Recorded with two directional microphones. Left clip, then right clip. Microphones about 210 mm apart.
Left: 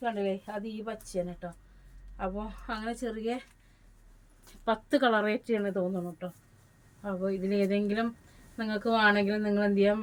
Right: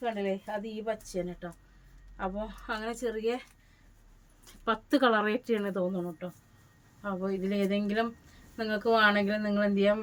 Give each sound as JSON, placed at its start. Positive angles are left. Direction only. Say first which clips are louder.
{"t": 0.0, "sound": "a woman's voice", "louder": "left 1 dB", "side_deg": -20}
{"t": 4.6, "sound": "a woman's voice", "louder": "even", "side_deg": -20}